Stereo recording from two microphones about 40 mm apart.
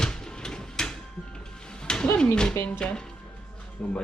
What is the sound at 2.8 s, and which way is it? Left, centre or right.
Speech, left.